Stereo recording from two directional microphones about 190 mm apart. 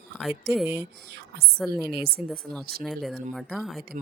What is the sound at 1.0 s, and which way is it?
Speech, 60° right (ahead or behind).